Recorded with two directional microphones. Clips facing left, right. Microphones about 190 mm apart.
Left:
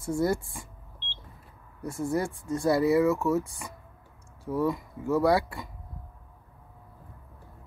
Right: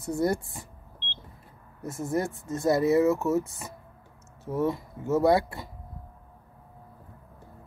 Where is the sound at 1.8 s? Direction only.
20° right (ahead or behind).